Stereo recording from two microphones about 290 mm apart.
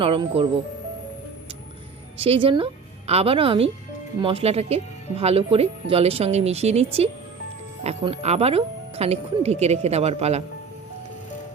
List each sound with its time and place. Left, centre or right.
0.0 s speech: centre
2.1 s speech: centre